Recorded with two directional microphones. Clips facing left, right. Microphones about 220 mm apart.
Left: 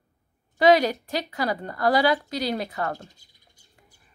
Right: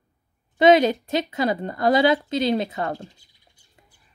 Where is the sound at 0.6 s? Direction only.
20° right (ahead or behind).